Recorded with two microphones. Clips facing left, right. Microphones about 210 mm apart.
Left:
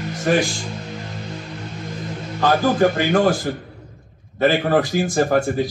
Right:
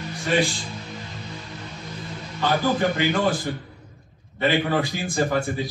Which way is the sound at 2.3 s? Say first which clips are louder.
Left 5 dB; 50° left (ahead or behind).